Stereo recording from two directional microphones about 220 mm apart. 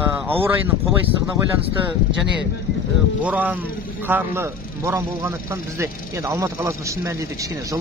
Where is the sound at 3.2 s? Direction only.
5° right (ahead or behind).